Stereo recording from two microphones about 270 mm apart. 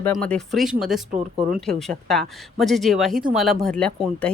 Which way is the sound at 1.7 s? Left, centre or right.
Centre.